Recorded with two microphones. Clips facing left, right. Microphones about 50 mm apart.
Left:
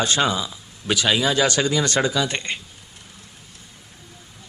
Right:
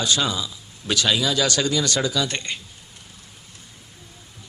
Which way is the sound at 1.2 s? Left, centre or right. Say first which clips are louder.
Left 2 dB; left.